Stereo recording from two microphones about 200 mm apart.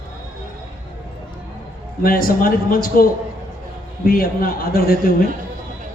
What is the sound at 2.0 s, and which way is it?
Speech, 45° left (ahead or behind).